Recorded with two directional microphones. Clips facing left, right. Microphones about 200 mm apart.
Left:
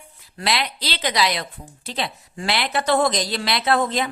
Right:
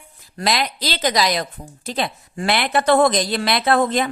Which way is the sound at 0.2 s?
45° right (ahead or behind).